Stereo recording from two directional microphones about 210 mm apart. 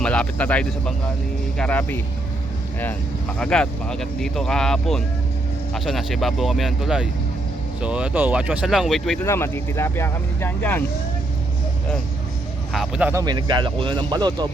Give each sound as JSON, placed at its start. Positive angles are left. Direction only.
{"t": 0.0, "sound": "speech", "side_deg": 5}
{"t": 9.2, "sound": "speech", "side_deg": 10}
{"t": 12.7, "sound": "speech", "side_deg": -5}
{"t": 13.2, "sound": "speech", "side_deg": -20}